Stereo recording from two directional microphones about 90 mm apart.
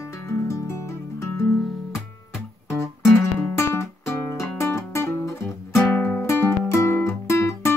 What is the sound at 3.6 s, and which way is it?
Music, 30° left (ahead or behind).